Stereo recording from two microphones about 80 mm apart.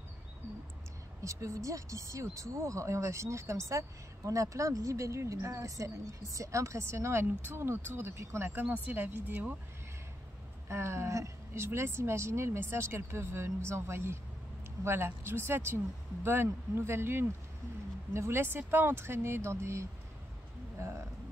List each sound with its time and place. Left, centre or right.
1.2 s speech: right
10.7 s speech: right